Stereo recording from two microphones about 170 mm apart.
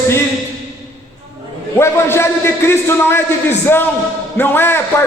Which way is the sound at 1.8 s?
15° left (ahead or behind).